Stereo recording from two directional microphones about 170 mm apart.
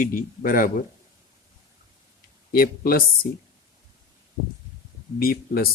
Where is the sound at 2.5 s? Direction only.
60° left (ahead or behind).